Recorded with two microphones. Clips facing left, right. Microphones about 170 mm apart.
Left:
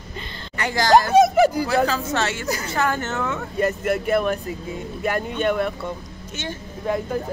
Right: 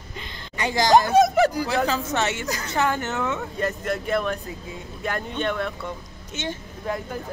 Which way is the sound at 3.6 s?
5° left (ahead or behind).